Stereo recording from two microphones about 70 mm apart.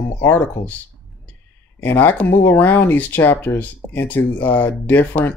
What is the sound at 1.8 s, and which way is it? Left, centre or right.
Speech, left.